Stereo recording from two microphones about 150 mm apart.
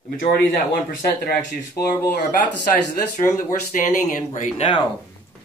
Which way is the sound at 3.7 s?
55° left (ahead or behind).